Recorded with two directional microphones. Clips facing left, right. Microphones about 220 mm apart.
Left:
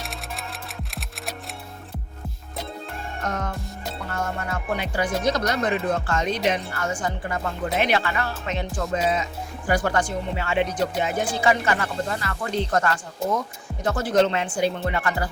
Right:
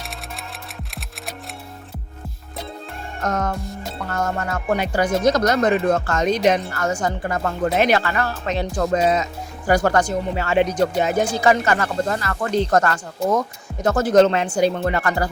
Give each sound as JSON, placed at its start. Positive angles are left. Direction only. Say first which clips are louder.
{"t": 3.2, "sound": "speech", "louder": "right 7 dB", "side_deg": -45}